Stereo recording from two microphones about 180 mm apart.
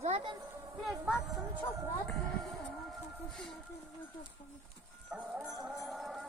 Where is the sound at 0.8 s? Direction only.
Centre (ahead or behind).